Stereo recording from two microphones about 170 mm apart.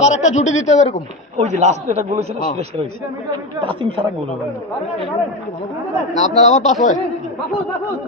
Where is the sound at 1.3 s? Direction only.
40° right (ahead or behind).